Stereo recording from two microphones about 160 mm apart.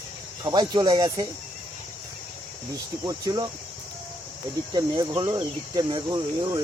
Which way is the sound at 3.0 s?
20° right (ahead or behind).